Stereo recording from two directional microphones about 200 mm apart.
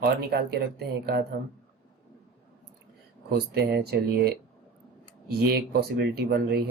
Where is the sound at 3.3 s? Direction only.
50° right (ahead or behind).